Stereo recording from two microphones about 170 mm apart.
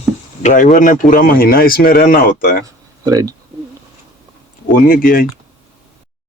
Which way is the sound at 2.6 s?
20° right (ahead or behind).